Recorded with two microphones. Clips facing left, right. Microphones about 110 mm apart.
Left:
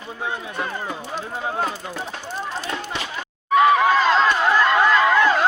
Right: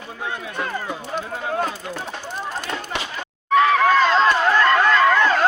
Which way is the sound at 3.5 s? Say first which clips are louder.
Even; 10° left (ahead or behind).